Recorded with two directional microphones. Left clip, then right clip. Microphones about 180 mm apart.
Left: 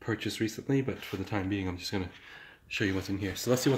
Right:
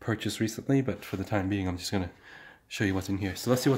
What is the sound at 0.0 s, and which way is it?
Speech, 55° right (ahead or behind).